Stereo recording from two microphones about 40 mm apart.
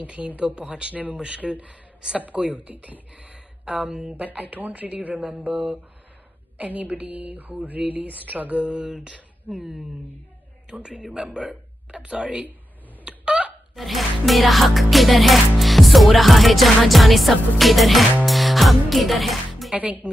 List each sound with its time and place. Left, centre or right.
0.0 s speech: right
0.6 s speech: right
3.2 s a sound: right
4.1 s speech: right
7.0 s mantra: right
7.8 s a man's voice: right
10.7 s a man's voice: right
13.0 s a sound: right
13.7 s music: centre
19.8 s speech: right